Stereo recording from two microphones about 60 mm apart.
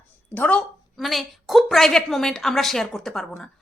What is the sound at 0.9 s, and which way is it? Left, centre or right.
A woman's voice, centre.